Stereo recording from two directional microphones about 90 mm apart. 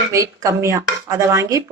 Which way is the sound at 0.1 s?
35° right (ahead or behind).